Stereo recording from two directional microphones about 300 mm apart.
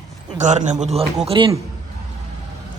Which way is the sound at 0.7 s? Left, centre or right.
Centre.